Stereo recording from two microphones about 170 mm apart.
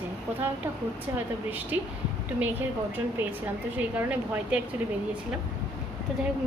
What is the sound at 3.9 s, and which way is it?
Speech, 10° right (ahead or behind).